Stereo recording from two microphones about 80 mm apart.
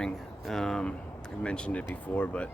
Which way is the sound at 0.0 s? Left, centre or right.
Centre.